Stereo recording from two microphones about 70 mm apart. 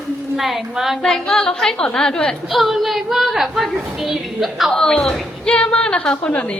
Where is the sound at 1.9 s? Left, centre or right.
Centre.